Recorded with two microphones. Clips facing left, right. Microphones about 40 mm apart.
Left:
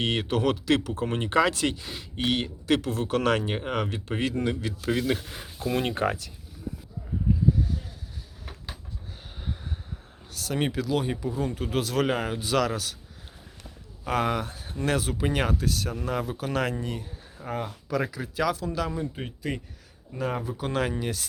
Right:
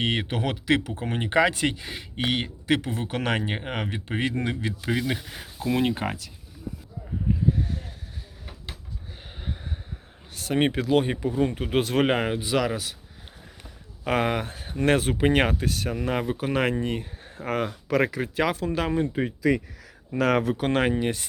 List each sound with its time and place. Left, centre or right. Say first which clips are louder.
0.0 s speech: left 1 dB; centre
4.9 s speech: left 1 dB; centre
7.5 s a sound: even; right
9.4 s a sound: right 1 dB; centre
10.3 s speech: right 4 dB; right
12.4 s speech: even; centre
14.0 s speech: right 2 dB; right
17.4 s speech: right 5 dB; right
17.8 s speech: right 5 dB; right
20.1 s speech: right 8 dB; right
20.8 s speech: right 5 dB; right